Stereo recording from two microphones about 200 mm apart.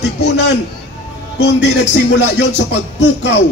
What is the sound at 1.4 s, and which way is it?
Music, 60° left (ahead or behind).